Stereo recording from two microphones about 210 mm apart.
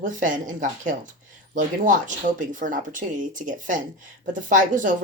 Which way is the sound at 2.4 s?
40° right (ahead or behind).